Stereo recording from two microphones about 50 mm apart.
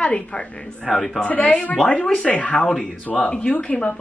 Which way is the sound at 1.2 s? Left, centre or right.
Left.